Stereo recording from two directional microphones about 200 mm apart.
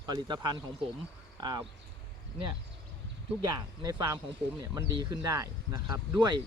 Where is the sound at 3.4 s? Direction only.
20° right (ahead or behind).